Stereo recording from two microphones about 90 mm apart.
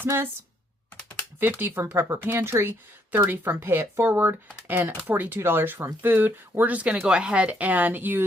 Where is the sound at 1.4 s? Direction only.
20° right (ahead or behind).